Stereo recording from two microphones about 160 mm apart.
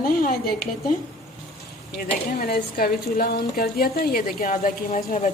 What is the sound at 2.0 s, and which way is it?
A woman's voice, 65° left (ahead or behind).